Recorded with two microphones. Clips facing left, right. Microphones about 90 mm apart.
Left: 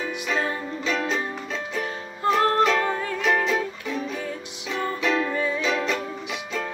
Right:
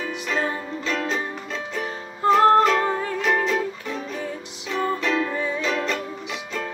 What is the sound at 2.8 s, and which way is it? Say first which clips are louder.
Music: right 2 dB; 25° right (ahead or behind).